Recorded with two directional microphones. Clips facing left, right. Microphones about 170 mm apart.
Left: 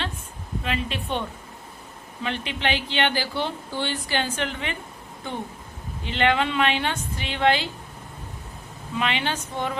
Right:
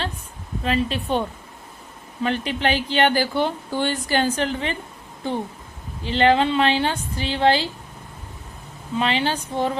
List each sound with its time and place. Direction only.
0.6 s speech: 35° right (ahead or behind)
2.2 s speech: 40° right (ahead or behind)
9.0 s speech: 35° right (ahead or behind)